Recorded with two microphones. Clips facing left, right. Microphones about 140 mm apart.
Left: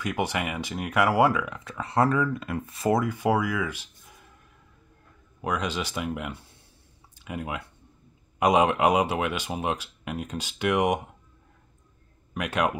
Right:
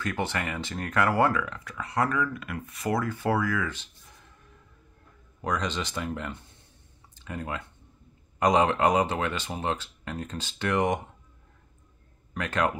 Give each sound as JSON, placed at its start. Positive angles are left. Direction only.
{"t": 0.0, "sound": "speech", "side_deg": 15}
{"t": 1.6, "sound": "speech", "side_deg": 25}
{"t": 3.0, "sound": "speech", "side_deg": 15}
{"t": 5.4, "sound": "speech", "side_deg": 10}
{"t": 12.4, "sound": "speech", "side_deg": 10}